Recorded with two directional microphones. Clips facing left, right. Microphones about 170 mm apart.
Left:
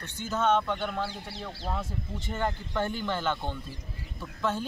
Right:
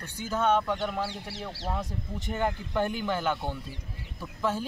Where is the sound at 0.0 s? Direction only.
10° right (ahead or behind).